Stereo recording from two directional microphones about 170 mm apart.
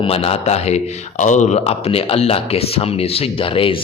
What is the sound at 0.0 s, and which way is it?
A man's voice, 35° left (ahead or behind).